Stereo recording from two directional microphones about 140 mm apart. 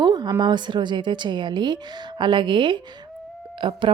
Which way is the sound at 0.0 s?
30° right (ahead or behind).